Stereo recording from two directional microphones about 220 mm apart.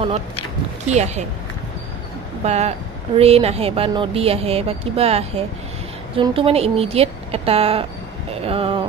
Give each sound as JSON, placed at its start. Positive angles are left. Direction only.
{"t": 0.8, "sound": "speech", "side_deg": -30}
{"t": 2.4, "sound": "speech", "side_deg": -30}